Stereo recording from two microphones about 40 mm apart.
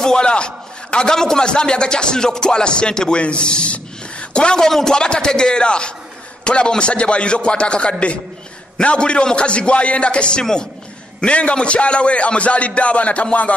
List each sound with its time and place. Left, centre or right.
0.0 s a man's voice: left
4.6 s a man's voice: centre; by 10.4 s left
10.4 s speech: centre
11.1 s a man's voice: left